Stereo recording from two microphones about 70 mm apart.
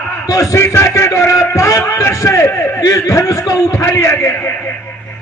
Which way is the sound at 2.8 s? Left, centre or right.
Left.